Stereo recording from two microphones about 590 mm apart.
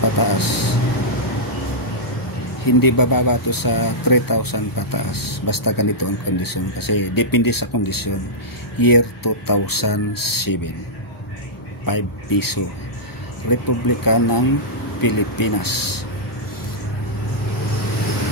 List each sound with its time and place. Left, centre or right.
0.0 s a sound: left
2.6 s speech: left
11.8 s speech: left